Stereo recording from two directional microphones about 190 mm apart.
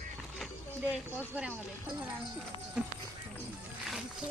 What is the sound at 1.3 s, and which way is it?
Speech, 10° right (ahead or behind).